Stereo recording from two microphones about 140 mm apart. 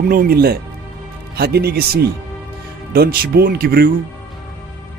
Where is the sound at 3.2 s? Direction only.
90° right.